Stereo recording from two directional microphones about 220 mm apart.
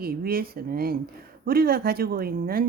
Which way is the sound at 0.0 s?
45° right (ahead or behind).